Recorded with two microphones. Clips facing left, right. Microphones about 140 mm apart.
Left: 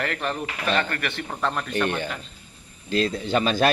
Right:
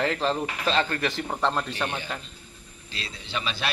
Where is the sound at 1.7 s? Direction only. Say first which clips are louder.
Left 6 dB; 10° right (ahead or behind).